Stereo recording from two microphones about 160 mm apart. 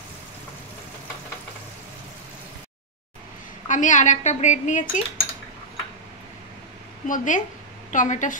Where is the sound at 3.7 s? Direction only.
50° left (ahead or behind).